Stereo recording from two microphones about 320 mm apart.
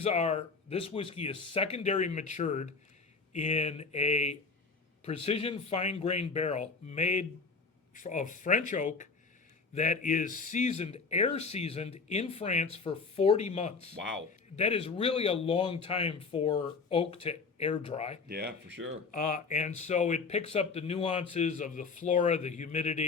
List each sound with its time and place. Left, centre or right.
0.0 s speech: centre
13.9 s speech: right
14.5 s speech: centre
18.3 s speech: right
19.1 s speech: left